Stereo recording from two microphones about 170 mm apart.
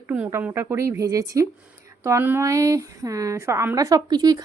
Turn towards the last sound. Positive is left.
turn(degrees=-25)  # may be behind; listen again after turning